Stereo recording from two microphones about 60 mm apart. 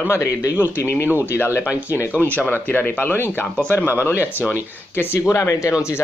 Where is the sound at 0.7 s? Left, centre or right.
Left.